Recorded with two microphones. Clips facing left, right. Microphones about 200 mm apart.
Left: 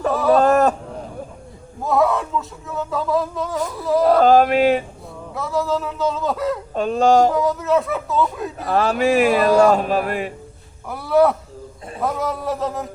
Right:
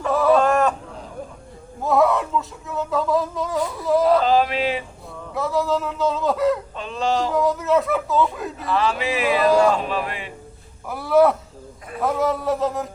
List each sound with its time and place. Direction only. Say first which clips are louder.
0.1 s a sound: even; centre (ahead or behind)
0.4 s a sound: left 4 dB; 40° left (ahead or behind)
1.8 s speech: even; centre (ahead or behind)
4.2 s speech: left 6 dB; 50° left (ahead or behind)
5.3 s speech: even; centre (ahead or behind)
6.7 s speech: left 8 dB; 45° left (ahead or behind)
7.3 s speech: even; centre (ahead or behind)
8.5 s speech: left 4 dB; 45° left (ahead or behind)
10.8 s speech: even; centre (ahead or behind)